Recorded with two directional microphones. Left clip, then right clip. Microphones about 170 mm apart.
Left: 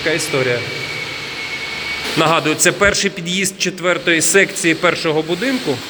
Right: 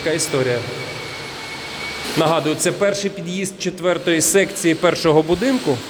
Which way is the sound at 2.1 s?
10° right (ahead or behind).